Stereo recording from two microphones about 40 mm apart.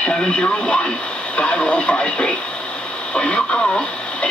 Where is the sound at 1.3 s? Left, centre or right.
Left.